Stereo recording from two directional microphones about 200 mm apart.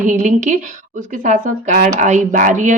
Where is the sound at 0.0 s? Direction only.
40° right (ahead or behind).